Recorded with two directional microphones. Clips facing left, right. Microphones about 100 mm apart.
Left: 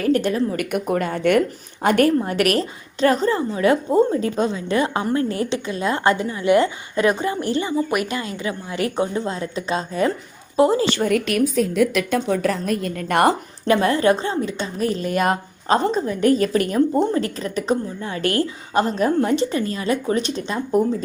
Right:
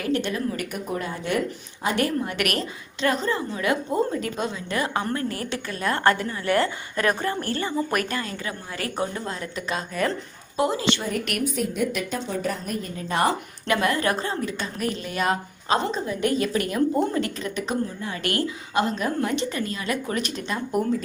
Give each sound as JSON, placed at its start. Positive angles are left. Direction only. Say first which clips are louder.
{"t": 0.1, "sound": "a woman's voice", "louder": "left 5 dB", "side_deg": 40}
{"t": 0.6, "sound": "speech", "louder": "left 7 dB", "side_deg": 75}
{"t": 1.8, "sound": "a woman's voice", "louder": "left 7 dB", "side_deg": 60}
{"t": 2.2, "sound": "a woman's voice", "louder": "left 7 dB", "side_deg": 35}
{"t": 8.2, "sound": "a woman's voice", "louder": "left 5 dB", "side_deg": 20}
{"t": 11.7, "sound": "a woman's voice", "louder": "left 7 dB", "side_deg": 90}
{"t": 13.7, "sound": "a woman's voice", "louder": "left 5 dB", "side_deg": 30}